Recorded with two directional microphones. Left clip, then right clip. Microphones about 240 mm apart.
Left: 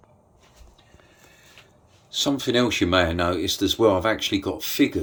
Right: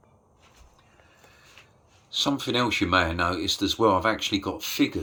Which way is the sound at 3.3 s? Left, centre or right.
Right.